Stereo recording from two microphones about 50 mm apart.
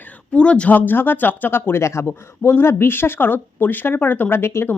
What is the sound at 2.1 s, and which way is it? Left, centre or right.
Speech, left.